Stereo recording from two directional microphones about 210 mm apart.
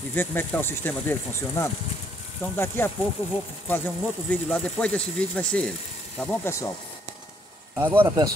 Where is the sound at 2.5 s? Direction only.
10° left (ahead or behind).